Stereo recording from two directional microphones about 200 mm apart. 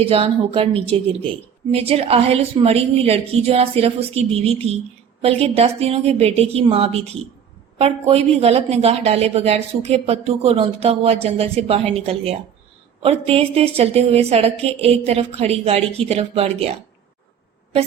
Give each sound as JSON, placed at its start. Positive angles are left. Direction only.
{"t": 0.1, "sound": "a woman's voice", "side_deg": -30}